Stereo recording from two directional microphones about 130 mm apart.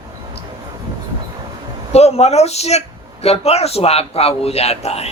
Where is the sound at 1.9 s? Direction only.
55° left (ahead or behind).